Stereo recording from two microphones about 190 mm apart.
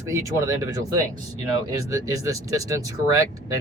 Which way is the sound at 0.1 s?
15° right (ahead or behind).